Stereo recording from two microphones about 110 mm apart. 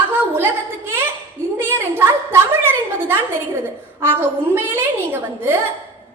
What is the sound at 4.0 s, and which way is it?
A woman's voice, 20° right (ahead or behind).